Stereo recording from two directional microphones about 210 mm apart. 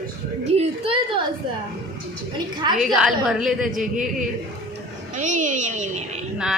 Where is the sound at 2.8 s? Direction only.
Centre (ahead or behind).